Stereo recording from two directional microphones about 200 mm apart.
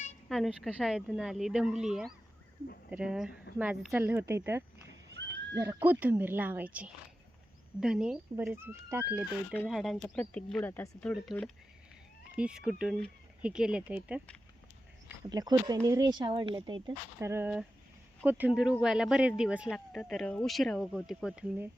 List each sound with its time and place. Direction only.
0.3 s speech: centre (ahead or behind)
9.6 s speech: centre (ahead or behind)
15.2 s speech: 20° right (ahead or behind); by 21.7 s 5° right (ahead or behind)